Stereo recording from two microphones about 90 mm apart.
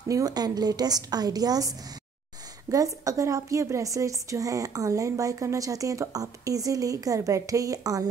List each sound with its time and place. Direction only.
0.1 s a woman's voice: 45° right (ahead or behind)
2.7 s a woman's voice: 40° right (ahead or behind)